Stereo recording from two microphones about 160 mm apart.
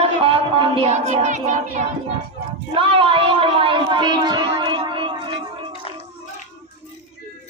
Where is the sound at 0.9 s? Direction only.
45° right (ahead or behind).